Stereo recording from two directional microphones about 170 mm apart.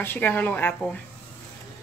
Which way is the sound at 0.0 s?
10° left (ahead or behind).